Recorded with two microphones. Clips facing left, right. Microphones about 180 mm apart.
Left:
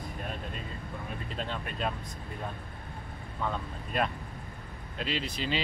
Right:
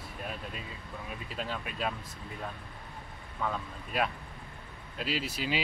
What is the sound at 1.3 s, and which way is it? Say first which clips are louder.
Speech: even; 5° right (ahead or behind).